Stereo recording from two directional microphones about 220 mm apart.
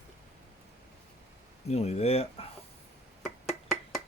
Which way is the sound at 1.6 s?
30° left (ahead or behind).